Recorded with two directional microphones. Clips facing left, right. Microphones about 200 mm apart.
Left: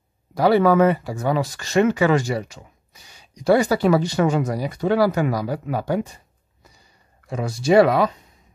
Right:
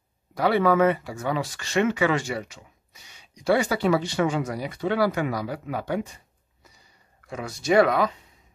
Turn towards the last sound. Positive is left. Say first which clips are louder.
# left 4 dB
turn(degrees=25)  # may be behind; listen again after turning